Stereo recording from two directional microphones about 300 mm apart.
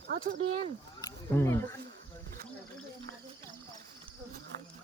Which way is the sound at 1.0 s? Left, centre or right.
Centre.